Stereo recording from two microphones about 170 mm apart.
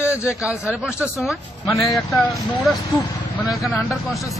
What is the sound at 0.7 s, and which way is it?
Speech, 5° right (ahead or behind).